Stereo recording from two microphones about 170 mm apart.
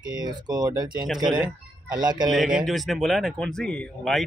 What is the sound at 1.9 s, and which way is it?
Speech, 25° right (ahead or behind).